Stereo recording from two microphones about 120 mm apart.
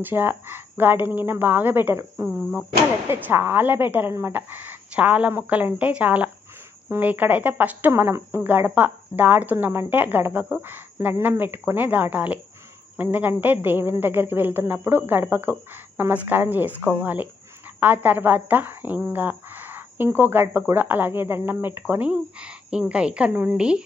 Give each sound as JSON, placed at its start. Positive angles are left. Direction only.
{"t": 0.0, "sound": "a woman's voice", "side_deg": -15}